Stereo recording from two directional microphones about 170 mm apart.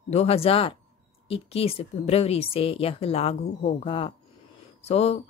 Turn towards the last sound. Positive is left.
turn(degrees=40)  # may be behind; listen again after turning